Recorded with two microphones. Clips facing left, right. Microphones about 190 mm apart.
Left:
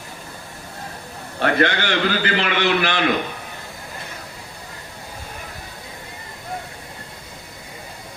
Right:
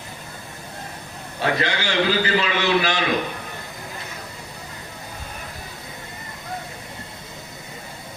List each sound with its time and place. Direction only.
1.4 s a man's voice: 60° left (ahead or behind)